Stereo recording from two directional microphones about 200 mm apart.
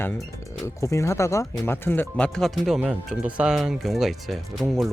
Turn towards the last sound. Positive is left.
turn(degrees=0)  # may be behind; listen again after turning